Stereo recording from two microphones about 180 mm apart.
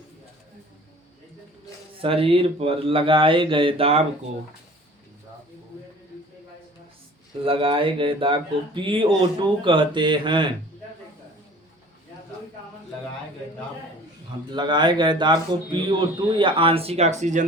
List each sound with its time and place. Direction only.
2.0 s speech: 30° right (ahead or behind)
7.4 s speech: 30° right (ahead or behind)
14.5 s speech: 25° right (ahead or behind); by 17.4 s 40° right (ahead or behind)